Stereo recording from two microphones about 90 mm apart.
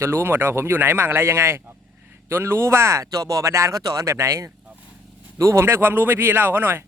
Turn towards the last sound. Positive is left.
turn(degrees=-25)  # may be behind; listen again after turning